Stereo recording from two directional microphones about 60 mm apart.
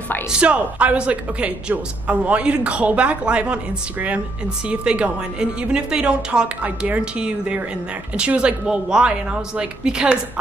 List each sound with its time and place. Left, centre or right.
0.3 s speech: centre
4.6 s a woman's voice: centre